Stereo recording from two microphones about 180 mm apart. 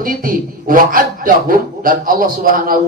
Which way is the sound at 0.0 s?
50° right (ahead or behind).